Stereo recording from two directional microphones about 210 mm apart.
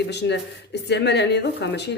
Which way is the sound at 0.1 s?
55° left (ahead or behind).